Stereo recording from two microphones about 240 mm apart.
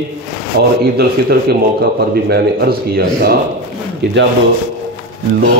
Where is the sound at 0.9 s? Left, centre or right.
Right.